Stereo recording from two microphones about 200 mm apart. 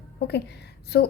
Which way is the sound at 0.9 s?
55° left (ahead or behind).